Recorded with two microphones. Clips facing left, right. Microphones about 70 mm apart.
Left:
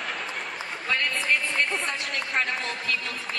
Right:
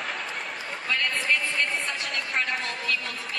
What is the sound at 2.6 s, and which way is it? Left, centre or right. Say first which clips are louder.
Speech: even; left.